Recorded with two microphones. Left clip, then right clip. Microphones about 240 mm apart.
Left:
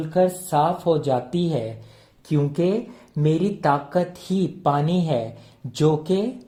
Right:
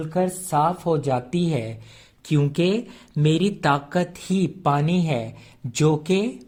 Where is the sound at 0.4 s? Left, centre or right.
Right.